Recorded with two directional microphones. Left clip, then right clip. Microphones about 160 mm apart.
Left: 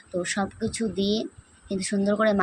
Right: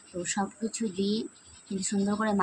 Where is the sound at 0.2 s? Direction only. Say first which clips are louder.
Left 4 dB; 15° left (ahead or behind).